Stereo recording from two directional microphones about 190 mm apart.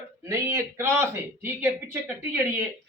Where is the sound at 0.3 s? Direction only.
15° right (ahead or behind).